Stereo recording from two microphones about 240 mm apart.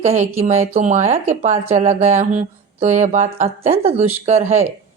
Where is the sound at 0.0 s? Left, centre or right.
Right.